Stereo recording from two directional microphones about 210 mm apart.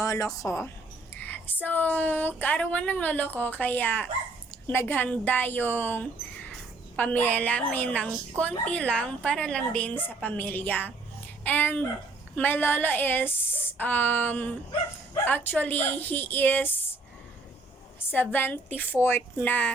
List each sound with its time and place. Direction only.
0.0 s a woman's voice: 15° left (ahead or behind)
1.1 s a sound: 10° left (ahead or behind)
1.6 s speech: 10° left (ahead or behind)
18.1 s speech: 10° left (ahead or behind)